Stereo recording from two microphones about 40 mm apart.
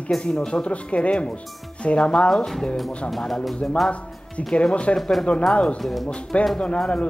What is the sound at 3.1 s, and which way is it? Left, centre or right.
Speech, centre.